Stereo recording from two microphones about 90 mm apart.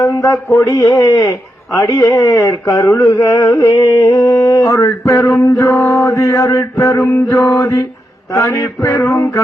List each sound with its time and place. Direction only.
0.0 s a man's voice: 35° left (ahead or behind)